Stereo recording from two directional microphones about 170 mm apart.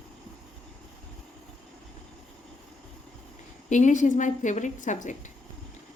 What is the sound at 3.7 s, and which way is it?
A woman's voice, 45° left (ahead or behind).